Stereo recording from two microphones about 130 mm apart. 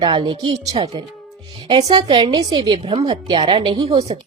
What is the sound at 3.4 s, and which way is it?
Speech, 45° right (ahead or behind).